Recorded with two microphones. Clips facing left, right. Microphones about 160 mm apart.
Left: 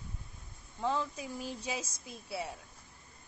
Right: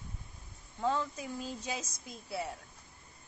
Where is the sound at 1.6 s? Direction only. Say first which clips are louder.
Left 1 dB; 10° left (ahead or behind).